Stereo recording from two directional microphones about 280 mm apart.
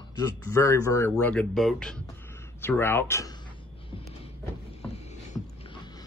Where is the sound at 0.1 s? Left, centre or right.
Centre.